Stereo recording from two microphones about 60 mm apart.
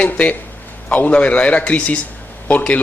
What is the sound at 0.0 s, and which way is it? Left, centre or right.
A man's voice, left.